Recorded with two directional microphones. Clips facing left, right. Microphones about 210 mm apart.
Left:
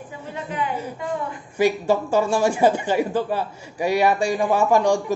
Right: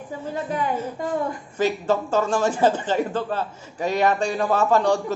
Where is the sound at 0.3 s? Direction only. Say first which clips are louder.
Right 2 dB; 40° right (ahead or behind).